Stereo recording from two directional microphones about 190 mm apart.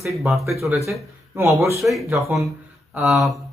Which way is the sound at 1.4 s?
15° right (ahead or behind).